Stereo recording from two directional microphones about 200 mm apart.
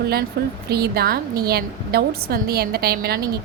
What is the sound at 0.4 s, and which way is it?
A woman's voice, 55° right (ahead or behind).